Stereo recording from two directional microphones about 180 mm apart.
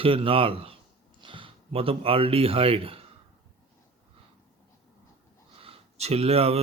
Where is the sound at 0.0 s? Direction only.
30° right (ahead or behind).